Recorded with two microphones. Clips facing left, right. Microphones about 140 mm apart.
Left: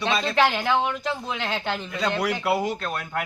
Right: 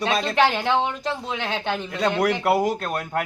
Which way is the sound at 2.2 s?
45° right (ahead or behind).